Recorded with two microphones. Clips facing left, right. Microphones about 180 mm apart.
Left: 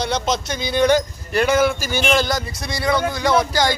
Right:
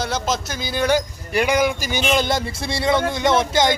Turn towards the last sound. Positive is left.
turn(degrees=-25)  # may be behind; listen again after turning